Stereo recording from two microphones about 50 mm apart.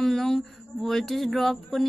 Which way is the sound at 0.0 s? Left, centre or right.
Centre.